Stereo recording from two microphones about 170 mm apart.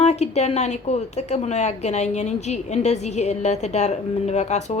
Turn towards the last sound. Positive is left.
turn(degrees=40)  # may be behind; listen again after turning